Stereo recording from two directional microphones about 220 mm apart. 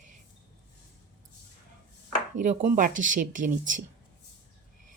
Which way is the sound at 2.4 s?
35° right (ahead or behind).